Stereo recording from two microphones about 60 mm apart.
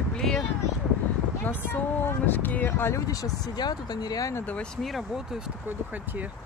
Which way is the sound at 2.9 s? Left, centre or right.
Left.